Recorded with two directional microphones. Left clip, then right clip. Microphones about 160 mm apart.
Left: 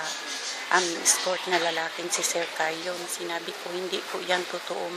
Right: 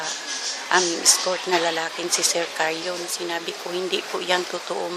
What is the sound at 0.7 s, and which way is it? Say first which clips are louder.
Speech: right 4 dB; 15° right (ahead or behind).